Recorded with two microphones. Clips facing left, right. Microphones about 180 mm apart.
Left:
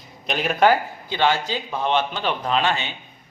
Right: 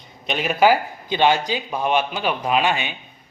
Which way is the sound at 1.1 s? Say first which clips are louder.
Right 3 dB; 15° right (ahead or behind).